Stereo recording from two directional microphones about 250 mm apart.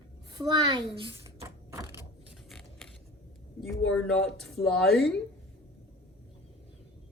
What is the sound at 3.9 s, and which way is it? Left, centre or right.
Speech, centre.